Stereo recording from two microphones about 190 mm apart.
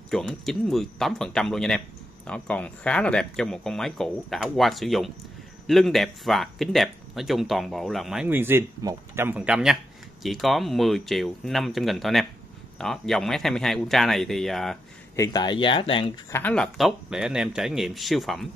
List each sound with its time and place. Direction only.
0.1 s speech: centre (ahead or behind)
15.1 s speech: 20° left (ahead or behind)
16.3 s speech: 10° left (ahead or behind)